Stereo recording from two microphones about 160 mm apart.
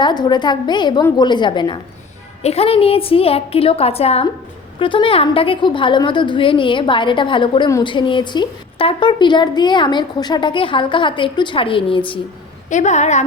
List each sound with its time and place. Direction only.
0.0 s a woman's voice: 25° left (ahead or behind)
2.4 s a woman's voice: 40° left (ahead or behind)
12.7 s a woman's voice: 45° left (ahead or behind)